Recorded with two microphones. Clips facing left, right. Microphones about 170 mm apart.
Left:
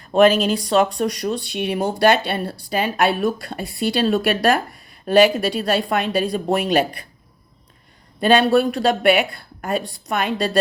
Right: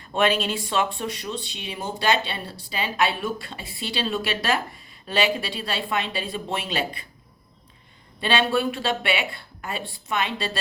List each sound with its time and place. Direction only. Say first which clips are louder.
0.1 s speech: left 8 dB; 40° left (ahead or behind)
1.3 s a woman's voice: left 10 dB; 60° left (ahead or behind)
8.2 s a woman's voice: left 8 dB; 45° left (ahead or behind)